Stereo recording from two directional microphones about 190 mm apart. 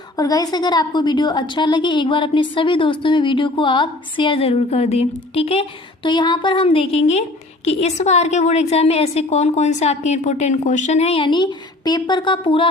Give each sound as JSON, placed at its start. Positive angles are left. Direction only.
{"t": 0.2, "sound": "a woman's voice", "side_deg": 20}